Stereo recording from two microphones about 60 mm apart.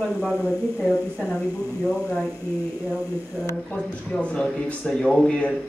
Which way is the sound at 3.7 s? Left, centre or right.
Centre.